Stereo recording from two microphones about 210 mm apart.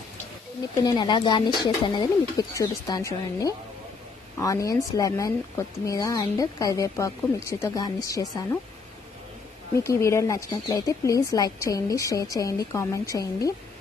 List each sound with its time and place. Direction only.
0.7 s speech: 20° left (ahead or behind)
9.8 s speech: 15° left (ahead or behind)